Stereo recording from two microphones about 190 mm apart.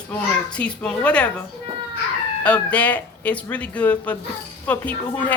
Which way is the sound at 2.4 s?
10° left (ahead or behind).